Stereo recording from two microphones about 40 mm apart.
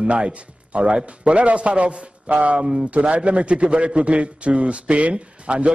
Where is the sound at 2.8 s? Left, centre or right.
Right.